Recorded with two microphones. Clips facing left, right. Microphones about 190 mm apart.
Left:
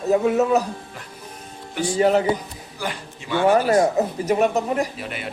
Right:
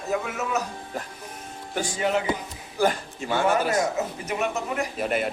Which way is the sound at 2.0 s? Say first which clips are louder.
Left 8 dB; 35° left (ahead or behind).